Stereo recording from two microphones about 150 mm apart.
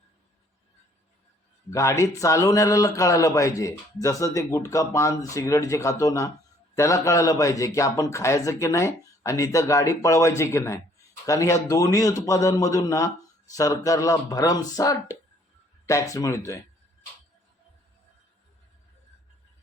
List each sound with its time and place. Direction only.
1.7 s speech: 20° left (ahead or behind)